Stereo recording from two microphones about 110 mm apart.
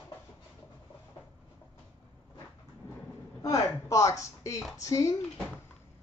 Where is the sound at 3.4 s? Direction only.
30° left (ahead or behind).